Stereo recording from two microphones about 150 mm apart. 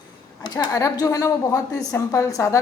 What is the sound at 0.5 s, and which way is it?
A woman's voice, 25° left (ahead or behind).